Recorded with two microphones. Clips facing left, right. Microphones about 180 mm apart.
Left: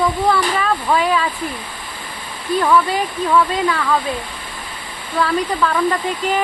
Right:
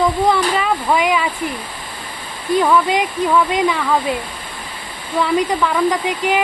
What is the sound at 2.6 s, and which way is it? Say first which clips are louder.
Speech: even; 15° right (ahead or behind).